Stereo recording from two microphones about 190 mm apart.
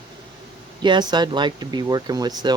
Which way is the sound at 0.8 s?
25° right (ahead or behind).